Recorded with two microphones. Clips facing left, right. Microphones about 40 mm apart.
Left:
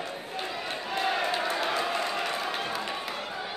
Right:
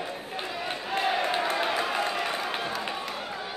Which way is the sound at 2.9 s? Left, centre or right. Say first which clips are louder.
Even; centre.